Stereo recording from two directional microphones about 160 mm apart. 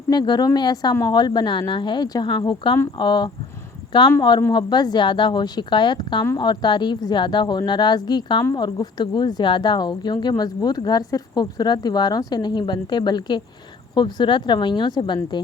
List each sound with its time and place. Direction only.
0.1 s speech: 25° left (ahead or behind)